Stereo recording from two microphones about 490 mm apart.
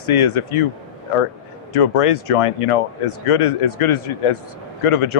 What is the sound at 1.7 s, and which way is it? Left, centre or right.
Speech, left.